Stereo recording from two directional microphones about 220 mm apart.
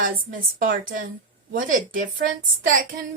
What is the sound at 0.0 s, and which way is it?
A woman's voice, 40° right (ahead or behind).